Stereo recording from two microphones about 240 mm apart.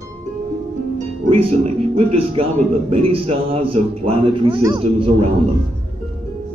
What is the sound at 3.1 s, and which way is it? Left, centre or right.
A man's voice, right.